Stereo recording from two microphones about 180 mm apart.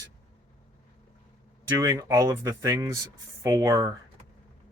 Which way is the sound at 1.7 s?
15° right (ahead or behind).